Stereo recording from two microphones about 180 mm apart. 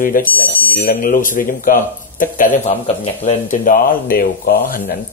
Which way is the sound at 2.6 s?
35° left (ahead or behind).